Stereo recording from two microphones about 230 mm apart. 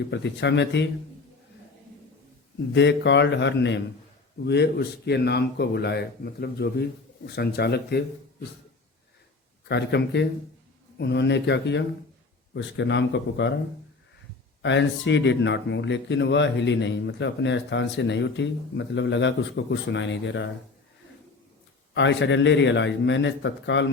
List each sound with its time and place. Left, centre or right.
0.1 s speech: left
2.7 s speech: left
9.6 s speech: left
14.6 s speech: left
21.9 s speech: left